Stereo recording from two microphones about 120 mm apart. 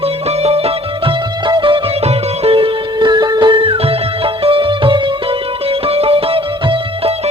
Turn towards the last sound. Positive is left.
turn(degrees=-50)  # may be behind; listen again after turning